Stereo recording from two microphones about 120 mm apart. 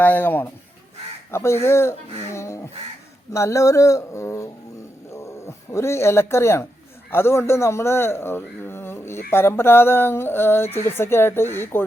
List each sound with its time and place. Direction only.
0.0 s speech: 15° left (ahead or behind)